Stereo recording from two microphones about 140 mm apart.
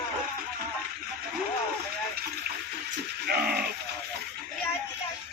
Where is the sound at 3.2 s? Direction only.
90° right.